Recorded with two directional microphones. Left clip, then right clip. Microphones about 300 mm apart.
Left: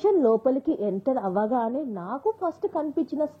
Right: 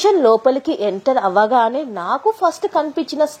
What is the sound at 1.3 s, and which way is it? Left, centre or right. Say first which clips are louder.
A woman's voice: right 11 dB; right.